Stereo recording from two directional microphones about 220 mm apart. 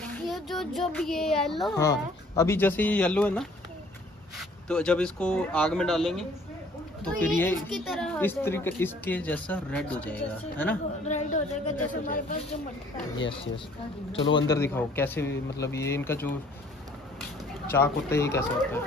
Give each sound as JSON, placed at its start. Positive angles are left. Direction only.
{"t": 0.0, "sound": "speech", "side_deg": 0}
{"t": 1.8, "sound": "speech", "side_deg": 15}
{"t": 11.1, "sound": "speech", "side_deg": 30}
{"t": 14.3, "sound": "speech", "side_deg": 15}
{"t": 17.6, "sound": "speech", "side_deg": 10}